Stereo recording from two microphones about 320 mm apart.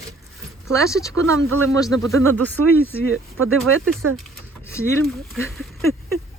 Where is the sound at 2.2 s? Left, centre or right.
Right.